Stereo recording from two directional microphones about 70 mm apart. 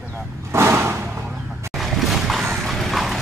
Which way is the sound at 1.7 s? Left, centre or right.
Centre.